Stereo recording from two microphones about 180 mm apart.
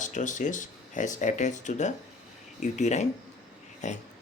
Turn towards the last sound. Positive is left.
turn(degrees=40)  # may be behind; listen again after turning